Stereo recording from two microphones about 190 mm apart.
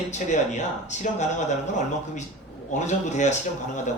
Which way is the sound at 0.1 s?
40° left (ahead or behind).